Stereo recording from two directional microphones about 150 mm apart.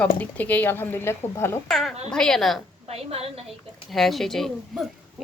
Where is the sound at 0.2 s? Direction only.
10° left (ahead or behind).